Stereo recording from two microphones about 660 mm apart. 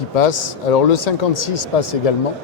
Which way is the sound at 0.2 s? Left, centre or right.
Left.